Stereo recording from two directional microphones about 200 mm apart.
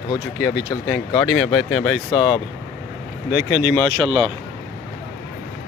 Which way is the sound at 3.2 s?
10° right (ahead or behind).